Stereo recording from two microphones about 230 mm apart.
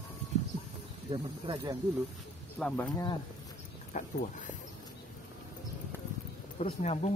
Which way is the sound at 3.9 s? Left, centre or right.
Left.